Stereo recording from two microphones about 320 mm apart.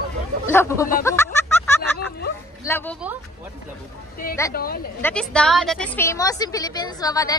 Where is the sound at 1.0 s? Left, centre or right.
Centre.